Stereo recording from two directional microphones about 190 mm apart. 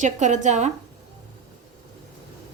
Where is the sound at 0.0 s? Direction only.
40° right (ahead or behind).